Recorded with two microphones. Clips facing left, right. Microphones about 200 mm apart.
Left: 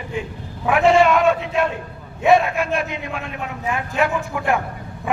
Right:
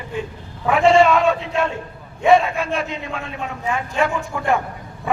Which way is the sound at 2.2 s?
5° left (ahead or behind).